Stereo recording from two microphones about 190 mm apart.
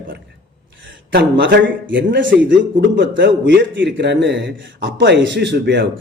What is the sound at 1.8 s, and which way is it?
A man's voice, 75° right (ahead or behind).